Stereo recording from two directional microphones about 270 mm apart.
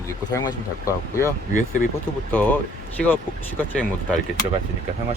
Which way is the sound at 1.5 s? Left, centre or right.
Left.